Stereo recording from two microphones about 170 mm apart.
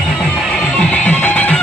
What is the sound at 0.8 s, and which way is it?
Music, 10° left (ahead or behind).